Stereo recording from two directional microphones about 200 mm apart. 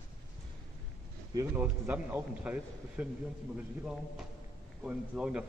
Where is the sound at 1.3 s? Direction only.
10° right (ahead or behind).